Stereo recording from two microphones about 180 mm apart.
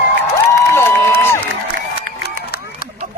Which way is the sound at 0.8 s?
10° left (ahead or behind).